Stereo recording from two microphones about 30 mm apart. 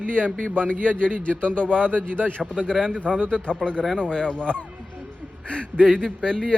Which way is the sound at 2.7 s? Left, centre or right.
Left.